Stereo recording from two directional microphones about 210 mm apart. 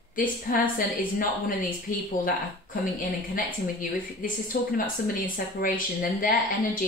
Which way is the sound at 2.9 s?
40° left (ahead or behind).